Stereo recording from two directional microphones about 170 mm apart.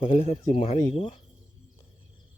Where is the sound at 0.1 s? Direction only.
40° left (ahead or behind).